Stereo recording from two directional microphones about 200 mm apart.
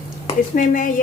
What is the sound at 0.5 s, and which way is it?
Speech, 40° left (ahead or behind).